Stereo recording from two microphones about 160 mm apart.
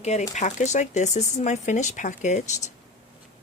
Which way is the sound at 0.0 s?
45° left (ahead or behind).